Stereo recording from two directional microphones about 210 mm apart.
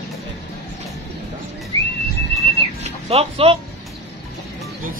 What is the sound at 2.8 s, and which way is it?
Speech, 30° right (ahead or behind).